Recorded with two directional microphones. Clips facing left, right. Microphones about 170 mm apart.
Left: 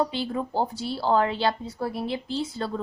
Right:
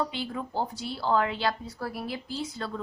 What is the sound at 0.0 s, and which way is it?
A woman's voice, 30° left (ahead or behind).